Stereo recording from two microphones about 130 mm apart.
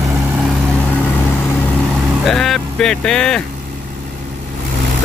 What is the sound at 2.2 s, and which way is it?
Speech, centre (ahead or behind).